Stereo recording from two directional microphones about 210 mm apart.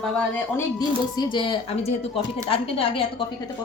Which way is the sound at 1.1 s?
20° left (ahead or behind).